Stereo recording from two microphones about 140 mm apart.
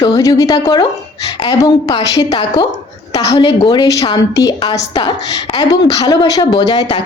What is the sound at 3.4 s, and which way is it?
A woman's voice, 30° left (ahead or behind).